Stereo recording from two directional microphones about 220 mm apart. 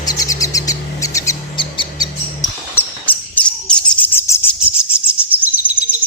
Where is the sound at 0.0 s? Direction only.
15° left (ahead or behind).